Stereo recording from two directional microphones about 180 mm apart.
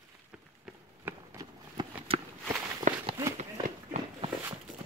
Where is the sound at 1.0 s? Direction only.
20° right (ahead or behind).